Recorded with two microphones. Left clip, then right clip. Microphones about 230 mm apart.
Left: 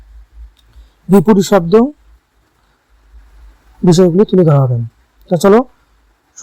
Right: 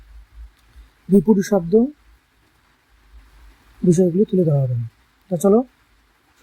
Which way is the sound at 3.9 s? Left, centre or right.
Left.